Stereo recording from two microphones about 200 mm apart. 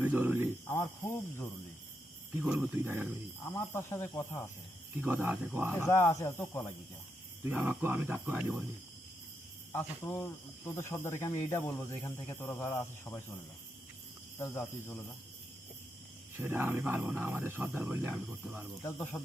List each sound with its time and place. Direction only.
0.0 s speech: 10° right (ahead or behind)
0.7 s speech: 15° left (ahead or behind)
2.4 s speech: 5° right (ahead or behind)
3.4 s speech: 10° left (ahead or behind)
4.9 s speech: 10° right (ahead or behind)
5.7 s speech: 15° left (ahead or behind)
7.4 s speech: 5° right (ahead or behind)
9.7 s speech: 10° left (ahead or behind)
14.3 s speech: 10° left (ahead or behind)
16.4 s speech: 10° right (ahead or behind)
18.8 s speech: 15° left (ahead or behind)